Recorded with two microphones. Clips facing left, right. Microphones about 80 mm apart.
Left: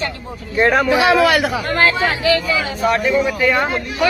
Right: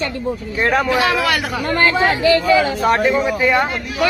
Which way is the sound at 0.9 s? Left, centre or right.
Centre.